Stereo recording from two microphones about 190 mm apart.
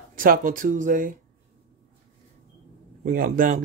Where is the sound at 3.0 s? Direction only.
45° right (ahead or behind).